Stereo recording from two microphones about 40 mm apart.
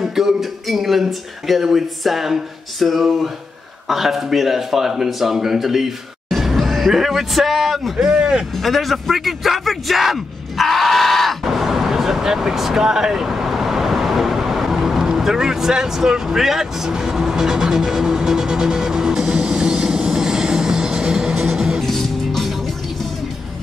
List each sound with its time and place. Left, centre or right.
0.0 s a sound: centre
3.8 s speech: centre
6.2 s music: centre
8.1 s speech: right
8.5 s a sound: centre
21.8 s music: centre